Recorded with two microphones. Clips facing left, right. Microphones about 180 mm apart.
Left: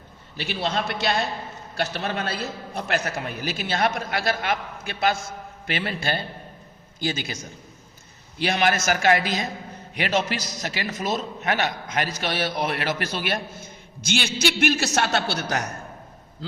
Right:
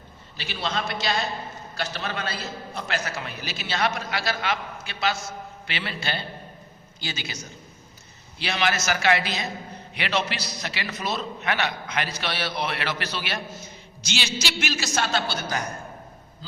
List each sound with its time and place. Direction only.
0.3 s a man's voice: 55° left (ahead or behind)
8.4 s a man's voice: 50° left (ahead or behind); by 15.7 s 70° left (ahead or behind)
16.4 s a sound: 70° left (ahead or behind)